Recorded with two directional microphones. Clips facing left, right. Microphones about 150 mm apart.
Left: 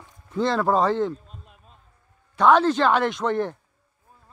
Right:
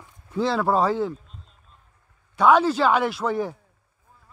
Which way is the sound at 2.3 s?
10° right (ahead or behind).